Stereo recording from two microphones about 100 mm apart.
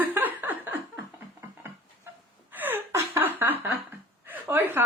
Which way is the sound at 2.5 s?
20° right (ahead or behind).